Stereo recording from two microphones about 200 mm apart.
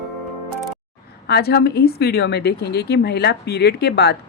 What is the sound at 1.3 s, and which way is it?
A woman's voice, 55° left (ahead or behind).